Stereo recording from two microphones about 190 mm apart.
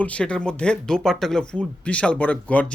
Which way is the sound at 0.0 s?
5° left (ahead or behind).